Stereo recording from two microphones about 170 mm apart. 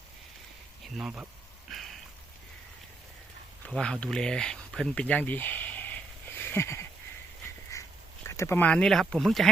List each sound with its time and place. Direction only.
0.9 s speech: 5° right (ahead or behind)
1.7 s rain on surface: centre (ahead or behind)
3.7 s speech: 5° left (ahead or behind)
7.7 s duck: 20° left (ahead or behind)
8.3 s speech: 15° left (ahead or behind); by 9.5 s centre (ahead or behind)